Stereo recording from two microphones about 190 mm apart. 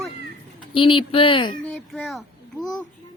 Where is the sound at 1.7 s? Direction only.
5° left (ahead or behind).